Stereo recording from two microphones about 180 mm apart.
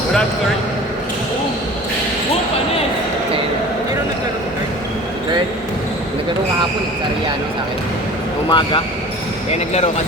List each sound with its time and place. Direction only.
8.4 s speech: 25° left (ahead or behind)
9.5 s speech: 35° left (ahead or behind)